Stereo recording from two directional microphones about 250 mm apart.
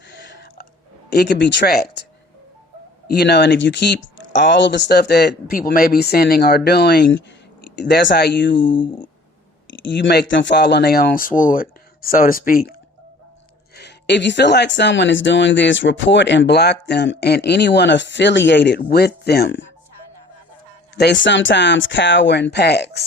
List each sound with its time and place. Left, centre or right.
0.1 s a sound: left
1.1 s speech: left
3.1 s speech: left
8.7 s speech: centre
9.8 s speech: left
13.7 s speech: left
20.9 s speech: left